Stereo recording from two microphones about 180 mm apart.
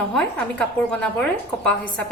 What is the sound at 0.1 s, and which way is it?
A woman's voice, 5° left (ahead or behind).